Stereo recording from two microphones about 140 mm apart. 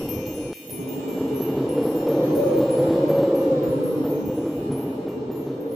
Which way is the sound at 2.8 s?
Centre (ahead or behind).